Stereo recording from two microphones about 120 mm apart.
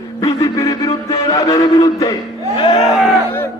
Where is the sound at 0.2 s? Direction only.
25° left (ahead or behind).